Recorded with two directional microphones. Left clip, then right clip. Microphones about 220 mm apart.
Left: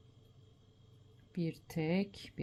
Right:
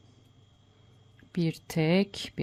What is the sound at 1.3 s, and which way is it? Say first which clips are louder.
Speech: right 9 dB; 35° right (ahead or behind).